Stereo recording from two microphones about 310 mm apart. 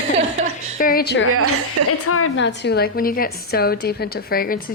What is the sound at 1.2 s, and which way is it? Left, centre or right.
Speech, right.